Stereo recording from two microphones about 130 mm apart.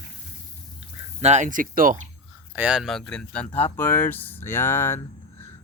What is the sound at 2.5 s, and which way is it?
Speech, 5° right (ahead or behind).